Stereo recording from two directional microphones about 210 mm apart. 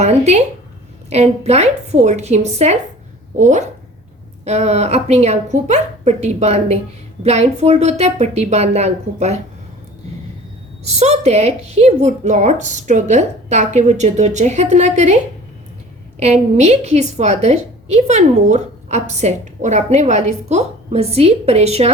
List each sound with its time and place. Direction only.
0.0 s a woman's voice: 30° right (ahead or behind)
10.8 s a woman's voice: 30° right (ahead or behind)
16.2 s a woman's voice: 30° right (ahead or behind)